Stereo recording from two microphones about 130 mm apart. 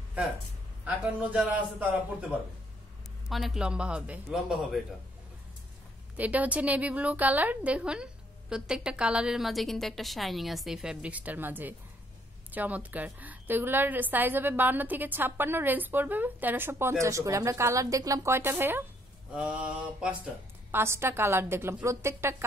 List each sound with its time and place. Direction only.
0.2 s a woman's voice: 10° right (ahead or behind)
3.3 s a man's voice: centre (ahead or behind)
6.1 s a woman's voice: 10° right (ahead or behind)